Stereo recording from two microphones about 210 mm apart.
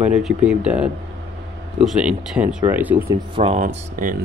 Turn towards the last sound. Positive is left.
turn(degrees=-40)  # may be behind; listen again after turning